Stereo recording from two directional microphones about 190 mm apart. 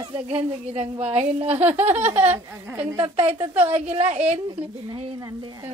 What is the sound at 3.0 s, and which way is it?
Speech, 30° right (ahead or behind).